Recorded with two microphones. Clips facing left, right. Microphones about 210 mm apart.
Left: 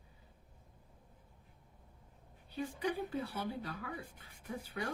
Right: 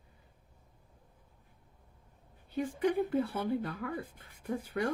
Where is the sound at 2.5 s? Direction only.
50° right (ahead or behind).